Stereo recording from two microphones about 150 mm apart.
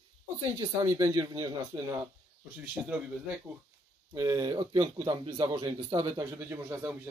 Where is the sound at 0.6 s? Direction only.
20° right (ahead or behind).